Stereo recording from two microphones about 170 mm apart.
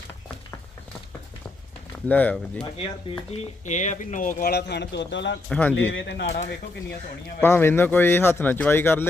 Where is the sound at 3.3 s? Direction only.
45° left (ahead or behind); by 5.4 s 90° left.